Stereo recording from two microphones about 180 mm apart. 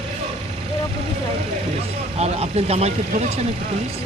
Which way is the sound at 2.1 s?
35° right (ahead or behind).